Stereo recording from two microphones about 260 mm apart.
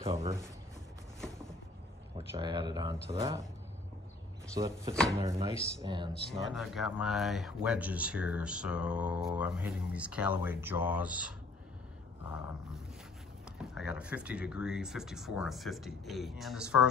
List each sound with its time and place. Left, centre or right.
0.0 s speech: right
2.1 s a sound: right
2.7 s speech: centre
4.6 s speech: centre
6.3 s speech: centre
13.6 s speech: centre